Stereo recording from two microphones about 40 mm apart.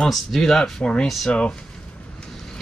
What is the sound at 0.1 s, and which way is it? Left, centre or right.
Speech, centre.